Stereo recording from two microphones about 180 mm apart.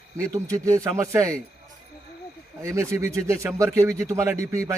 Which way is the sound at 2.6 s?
15° right (ahead or behind).